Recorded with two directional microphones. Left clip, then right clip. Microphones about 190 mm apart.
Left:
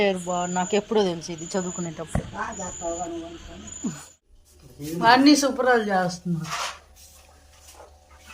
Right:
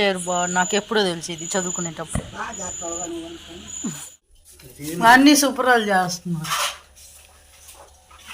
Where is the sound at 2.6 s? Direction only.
20° left (ahead or behind).